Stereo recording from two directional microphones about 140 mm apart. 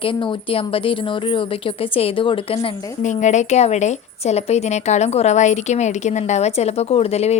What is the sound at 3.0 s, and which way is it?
A woman's voice, 60° left (ahead or behind).